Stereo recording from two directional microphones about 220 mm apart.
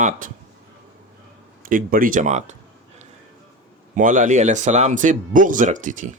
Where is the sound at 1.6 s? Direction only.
40° right (ahead or behind).